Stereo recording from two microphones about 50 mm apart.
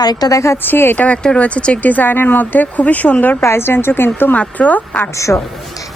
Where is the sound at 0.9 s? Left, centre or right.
Left.